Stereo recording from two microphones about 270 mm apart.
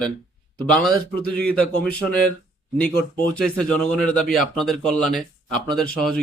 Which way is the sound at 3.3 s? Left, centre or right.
Centre.